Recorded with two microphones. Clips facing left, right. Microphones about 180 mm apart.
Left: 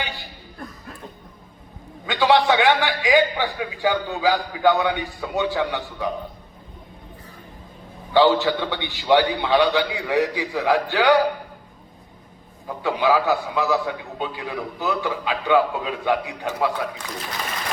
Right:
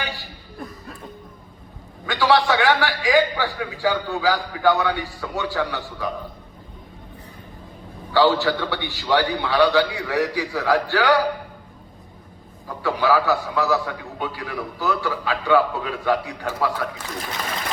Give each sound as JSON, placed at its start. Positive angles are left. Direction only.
{"t": 2.0, "sound": "a man's voice", "side_deg": 20}
{"t": 8.1, "sound": "a man's voice", "side_deg": 20}
{"t": 12.8, "sound": "a man's voice", "side_deg": 20}